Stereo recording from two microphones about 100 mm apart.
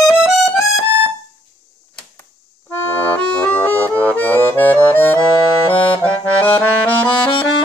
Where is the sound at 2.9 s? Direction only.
15° left (ahead or behind).